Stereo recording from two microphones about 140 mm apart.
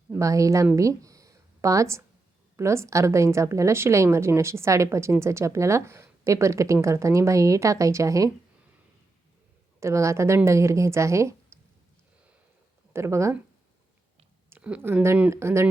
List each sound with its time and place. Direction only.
0.2 s a woman's voice: 25° right (ahead or behind)
0.8 s a sound: 25° right (ahead or behind)
2.6 s a woman's voice: 20° right (ahead or behind)
9.8 s a woman's voice: 20° right (ahead or behind)
12.9 s speech: 20° right (ahead or behind)
14.5 s speech: 10° right (ahead or behind)